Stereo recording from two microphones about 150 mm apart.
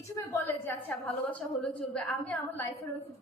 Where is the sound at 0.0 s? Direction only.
15° left (ahead or behind).